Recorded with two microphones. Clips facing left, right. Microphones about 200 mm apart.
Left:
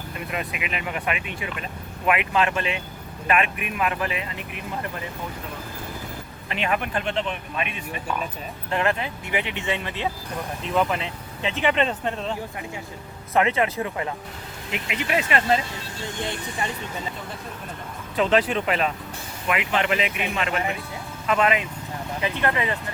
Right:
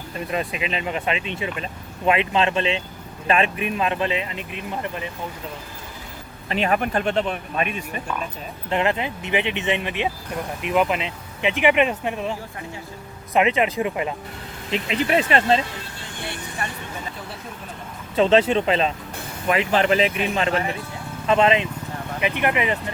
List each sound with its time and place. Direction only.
0.3 s speech: 30° right (ahead or behind)
6.5 s speech: 40° right (ahead or behind)
8.7 s speech: 20° right (ahead or behind)
13.3 s speech: 20° right (ahead or behind)
14.7 s speech: 30° right (ahead or behind)
18.2 s speech: 25° right (ahead or behind)